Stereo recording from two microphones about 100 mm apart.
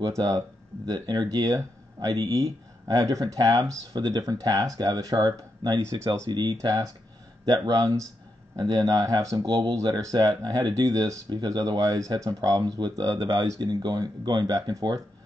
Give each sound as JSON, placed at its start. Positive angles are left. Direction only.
{"t": 0.0, "sound": "speech", "side_deg": -40}
{"t": 5.8, "sound": "speech", "side_deg": -30}